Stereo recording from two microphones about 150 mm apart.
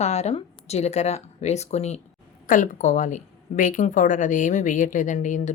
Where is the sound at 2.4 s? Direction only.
65° left (ahead or behind).